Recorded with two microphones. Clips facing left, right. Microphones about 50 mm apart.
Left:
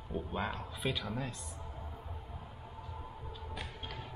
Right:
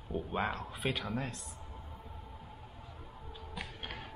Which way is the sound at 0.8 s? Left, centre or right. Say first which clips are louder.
Right 1 dB; right.